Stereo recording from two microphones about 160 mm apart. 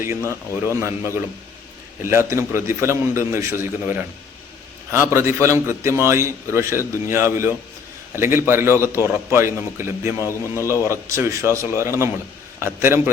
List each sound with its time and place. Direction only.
0.0 s a man's voice: 15° right (ahead or behind)